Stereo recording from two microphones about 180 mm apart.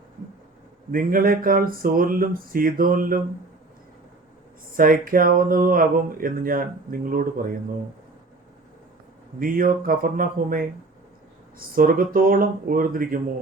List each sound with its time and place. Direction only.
0.9 s speech: 50° right (ahead or behind)
4.7 s speech: 50° right (ahead or behind)
9.4 s speech: 50° right (ahead or behind)
11.7 s speech: 50° right (ahead or behind)